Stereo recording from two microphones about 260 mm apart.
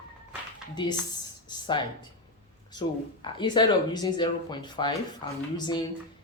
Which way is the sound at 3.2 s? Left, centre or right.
Centre.